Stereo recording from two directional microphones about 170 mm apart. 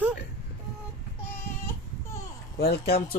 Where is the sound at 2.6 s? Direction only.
65° left (ahead or behind).